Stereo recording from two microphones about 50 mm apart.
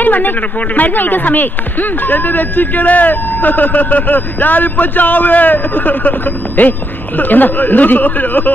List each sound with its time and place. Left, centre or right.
0.0 s a man's voice: left